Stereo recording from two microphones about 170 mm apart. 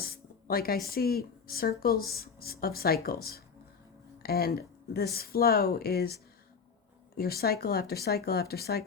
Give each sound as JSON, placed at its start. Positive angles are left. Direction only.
{"t": 0.0, "sound": "speech", "side_deg": 60}
{"t": 7.2, "sound": "speech", "side_deg": 65}